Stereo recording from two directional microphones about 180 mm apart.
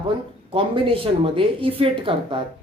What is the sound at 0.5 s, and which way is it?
Speech, 30° right (ahead or behind).